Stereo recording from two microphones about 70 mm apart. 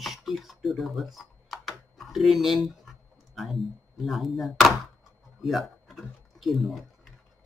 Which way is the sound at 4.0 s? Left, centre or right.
Centre.